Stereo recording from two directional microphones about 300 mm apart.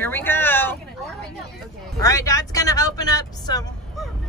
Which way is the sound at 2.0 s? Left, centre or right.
Centre.